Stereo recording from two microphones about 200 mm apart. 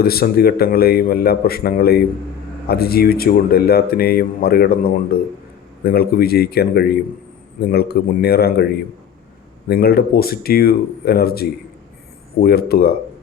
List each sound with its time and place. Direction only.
0.0 s speech: 50° left (ahead or behind)